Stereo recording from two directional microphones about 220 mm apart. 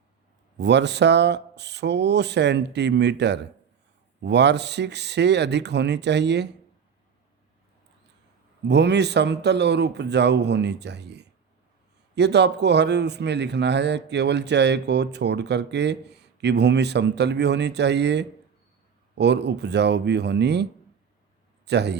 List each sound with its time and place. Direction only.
0.5 s a man's voice: 50° right (ahead or behind)
8.6 s a man's voice: 50° right (ahead or behind)
21.7 s a man's voice: 50° right (ahead or behind)